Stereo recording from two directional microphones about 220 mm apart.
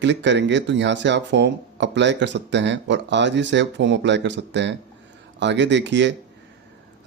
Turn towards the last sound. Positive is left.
turn(degrees=-55)  # may be behind; listen again after turning